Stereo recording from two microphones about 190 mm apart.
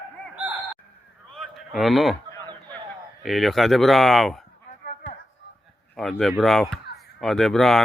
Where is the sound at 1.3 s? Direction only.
Centre (ahead or behind).